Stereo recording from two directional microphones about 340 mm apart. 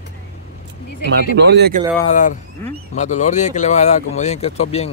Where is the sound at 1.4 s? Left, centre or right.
Right.